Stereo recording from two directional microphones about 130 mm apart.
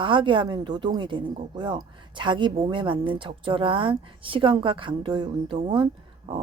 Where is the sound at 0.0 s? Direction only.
40° right (ahead or behind).